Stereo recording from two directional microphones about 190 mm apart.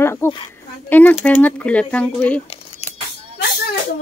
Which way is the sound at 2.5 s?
35° left (ahead or behind).